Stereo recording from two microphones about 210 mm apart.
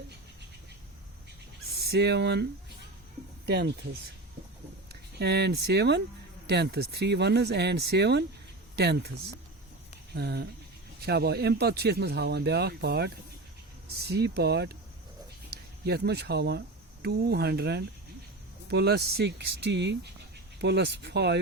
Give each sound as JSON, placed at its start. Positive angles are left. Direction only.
{"t": 1.8, "sound": "a man's voice", "side_deg": -50}
{"t": 5.2, "sound": "a man's voice", "side_deg": -50}
{"t": 10.2, "sound": "a man's voice", "side_deg": -50}
{"t": 15.8, "sound": "a man's voice", "side_deg": -50}